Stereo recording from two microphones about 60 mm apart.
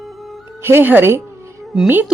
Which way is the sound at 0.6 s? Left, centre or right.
Right.